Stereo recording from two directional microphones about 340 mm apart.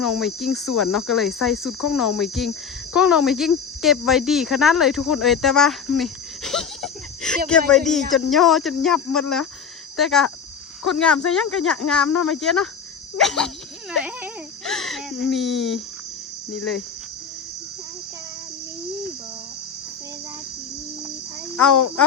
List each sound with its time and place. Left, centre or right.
0.0 s speech: centre
21.5 s speech: centre